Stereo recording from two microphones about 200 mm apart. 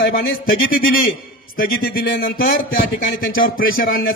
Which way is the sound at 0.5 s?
45° left (ahead or behind).